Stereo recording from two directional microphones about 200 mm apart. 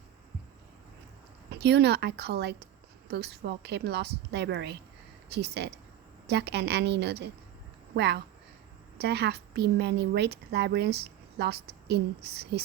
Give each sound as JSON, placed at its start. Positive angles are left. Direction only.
{"t": 1.5, "sound": "a woman's voice", "side_deg": -55}